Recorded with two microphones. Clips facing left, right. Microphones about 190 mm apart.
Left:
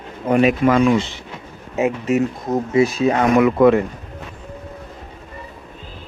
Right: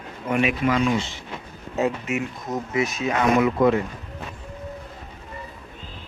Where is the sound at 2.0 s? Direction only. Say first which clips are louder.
Left 9 dB; 35° left (ahead or behind).